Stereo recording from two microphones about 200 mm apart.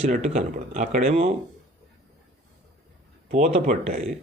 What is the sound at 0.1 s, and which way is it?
Speech, 35° right (ahead or behind).